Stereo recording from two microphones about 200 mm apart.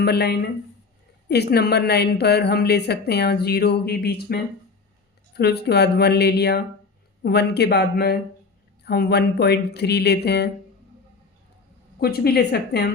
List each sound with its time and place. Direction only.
0.0 s a woman's voice: 55° left (ahead or behind)
5.4 s a woman's voice: 55° left (ahead or behind)
11.9 s a woman's voice: 50° left (ahead or behind)